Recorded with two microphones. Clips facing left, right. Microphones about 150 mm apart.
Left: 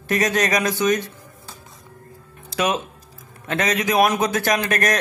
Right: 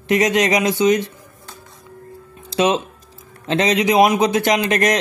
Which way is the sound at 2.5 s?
25° right (ahead or behind).